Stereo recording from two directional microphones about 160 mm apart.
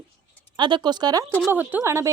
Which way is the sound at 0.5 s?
30° right (ahead or behind).